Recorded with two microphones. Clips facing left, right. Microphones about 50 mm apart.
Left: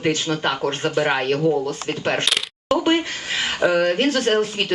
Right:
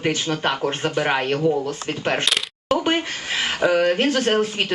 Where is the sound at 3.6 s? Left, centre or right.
Centre.